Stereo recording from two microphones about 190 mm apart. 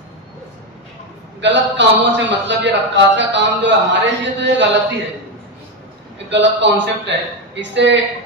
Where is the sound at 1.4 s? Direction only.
70° right (ahead or behind).